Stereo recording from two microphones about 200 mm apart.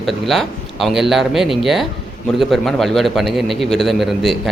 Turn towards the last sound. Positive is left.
turn(degrees=0)  # may be behind; listen again after turning